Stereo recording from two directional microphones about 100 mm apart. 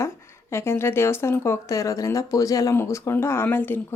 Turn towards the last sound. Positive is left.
turn(degrees=20)  # may be behind; listen again after turning